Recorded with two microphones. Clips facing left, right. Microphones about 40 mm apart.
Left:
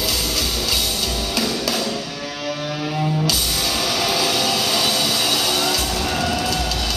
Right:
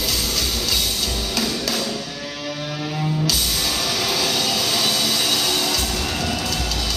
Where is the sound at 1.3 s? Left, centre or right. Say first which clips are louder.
Left 2 dB; centre.